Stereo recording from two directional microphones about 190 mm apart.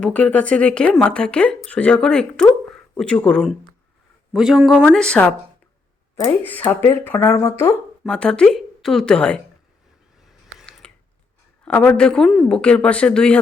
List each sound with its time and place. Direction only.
0.0 s speech: 5° left (ahead or behind)
8.0 s speech: 5° left (ahead or behind)
10.2 s a sound: centre (ahead or behind)
11.6 s speech: 5° left (ahead or behind)